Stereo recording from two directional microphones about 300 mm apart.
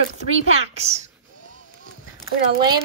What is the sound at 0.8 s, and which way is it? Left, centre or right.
Speech, right.